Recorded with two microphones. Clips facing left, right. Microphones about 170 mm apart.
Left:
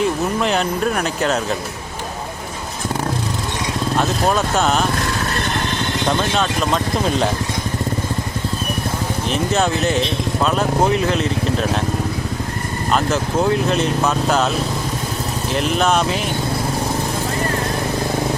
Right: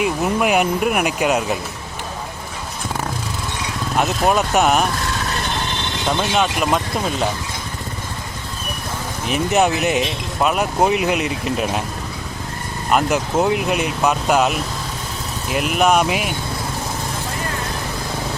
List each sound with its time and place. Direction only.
0.0 s speech: 10° right (ahead or behind)
3.9 s speech: 15° right (ahead or behind)
6.1 s speech: 10° right (ahead or behind)
9.3 s speech: 15° right (ahead or behind)
12.9 s speech: 15° right (ahead or behind)
15.5 s speech: 10° right (ahead or behind)